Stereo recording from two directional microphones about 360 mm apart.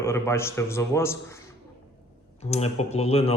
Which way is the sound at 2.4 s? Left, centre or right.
Centre.